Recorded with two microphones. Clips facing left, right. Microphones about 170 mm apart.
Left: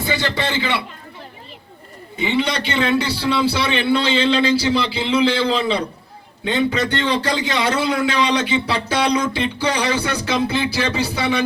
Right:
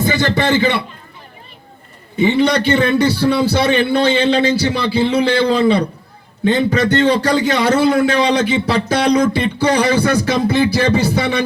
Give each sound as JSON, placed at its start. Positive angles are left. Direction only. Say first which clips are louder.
{"t": 0.0, "sound": "a man's voice", "louder": "right 6 dB", "side_deg": -45}
{"t": 2.1, "sound": "a man's voice", "louder": "right 7 dB", "side_deg": -45}